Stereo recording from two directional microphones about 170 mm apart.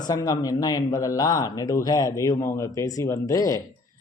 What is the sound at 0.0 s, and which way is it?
Speech, 20° left (ahead or behind).